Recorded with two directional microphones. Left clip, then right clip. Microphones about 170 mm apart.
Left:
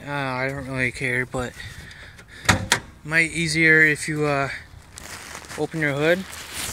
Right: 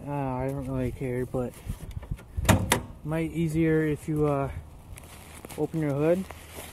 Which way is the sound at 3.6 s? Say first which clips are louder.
Left 11 dB; 15° left (ahead or behind).